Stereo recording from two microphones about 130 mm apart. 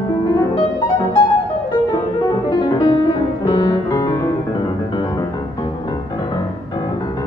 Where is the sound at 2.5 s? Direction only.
35° left (ahead or behind).